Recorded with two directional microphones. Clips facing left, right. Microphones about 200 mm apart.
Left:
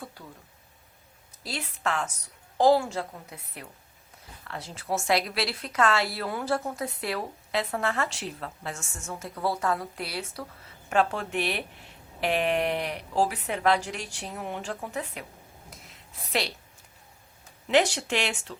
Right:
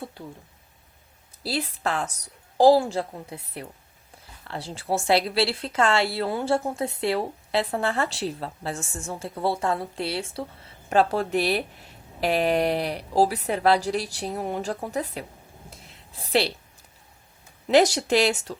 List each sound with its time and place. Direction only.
0.2 s a woman's voice: 25° right (ahead or behind)
1.5 s a woman's voice: 35° right (ahead or behind)
15.7 s a sound: 30° right (ahead or behind)
17.7 s speech: 40° right (ahead or behind)